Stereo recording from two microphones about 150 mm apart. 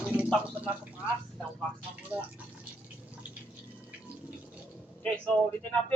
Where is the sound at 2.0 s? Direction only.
10° right (ahead or behind).